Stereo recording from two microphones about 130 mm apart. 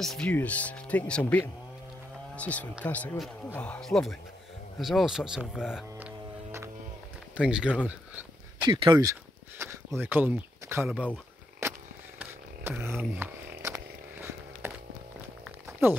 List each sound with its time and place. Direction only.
0.0 s speech: 5° left (ahead or behind)
5.9 s music: 15° right (ahead or behind)
7.3 s a sound: 5° right (ahead or behind)
8.6 s speech: 40° right (ahead or behind)
9.6 s speech: 15° right (ahead or behind)
11.6 s a sound: 20° right (ahead or behind)